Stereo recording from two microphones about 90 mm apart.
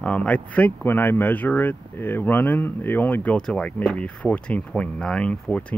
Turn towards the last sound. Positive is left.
turn(degrees=15)  # may be behind; listen again after turning